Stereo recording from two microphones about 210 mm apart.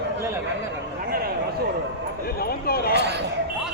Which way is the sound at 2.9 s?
50° right (ahead or behind).